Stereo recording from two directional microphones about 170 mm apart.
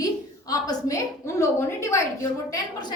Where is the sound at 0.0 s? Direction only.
20° left (ahead or behind).